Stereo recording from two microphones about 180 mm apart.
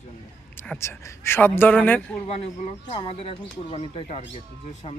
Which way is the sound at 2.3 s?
35° left (ahead or behind).